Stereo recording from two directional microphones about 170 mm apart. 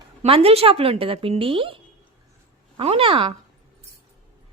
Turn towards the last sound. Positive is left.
turn(degrees=-30)  # may be behind; listen again after turning